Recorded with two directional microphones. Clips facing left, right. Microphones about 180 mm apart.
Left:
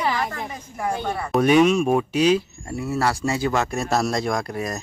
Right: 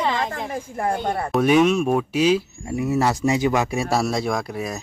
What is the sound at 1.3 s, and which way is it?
Speech, centre (ahead or behind).